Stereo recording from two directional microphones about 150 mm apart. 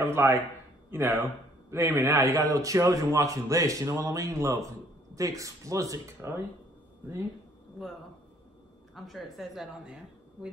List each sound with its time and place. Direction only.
0.0 s a man's voice: 15° right (ahead or behind)
8.9 s a woman's voice: centre (ahead or behind)